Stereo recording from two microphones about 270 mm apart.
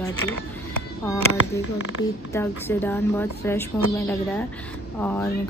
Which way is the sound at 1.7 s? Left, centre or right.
Left.